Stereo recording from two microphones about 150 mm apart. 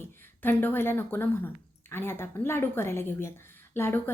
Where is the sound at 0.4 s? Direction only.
15° left (ahead or behind).